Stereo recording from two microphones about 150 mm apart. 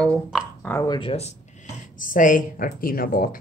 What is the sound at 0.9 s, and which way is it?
Speech, 40° left (ahead or behind).